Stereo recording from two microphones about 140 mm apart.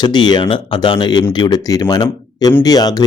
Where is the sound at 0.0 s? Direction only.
30° left (ahead or behind).